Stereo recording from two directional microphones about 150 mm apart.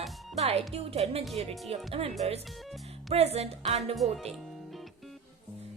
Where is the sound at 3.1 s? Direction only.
45° right (ahead or behind).